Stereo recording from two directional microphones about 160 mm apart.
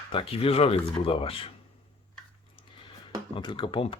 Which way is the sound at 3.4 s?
30° left (ahead or behind).